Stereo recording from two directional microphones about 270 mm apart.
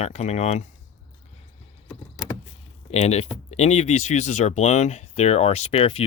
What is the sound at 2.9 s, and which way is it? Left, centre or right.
Speech, left.